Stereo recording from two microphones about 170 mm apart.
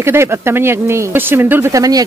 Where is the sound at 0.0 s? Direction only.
15° right (ahead or behind).